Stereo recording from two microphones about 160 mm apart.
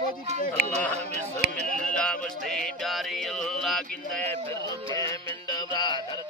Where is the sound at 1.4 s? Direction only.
90° right.